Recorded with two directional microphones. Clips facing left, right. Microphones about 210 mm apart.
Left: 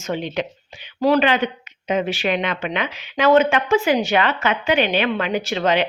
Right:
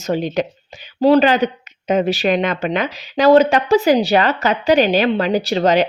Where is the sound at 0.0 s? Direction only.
40° right (ahead or behind).